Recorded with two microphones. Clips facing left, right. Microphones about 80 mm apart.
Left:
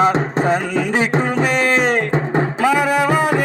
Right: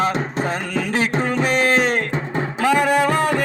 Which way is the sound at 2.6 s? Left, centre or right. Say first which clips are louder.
Right 1 dB; centre.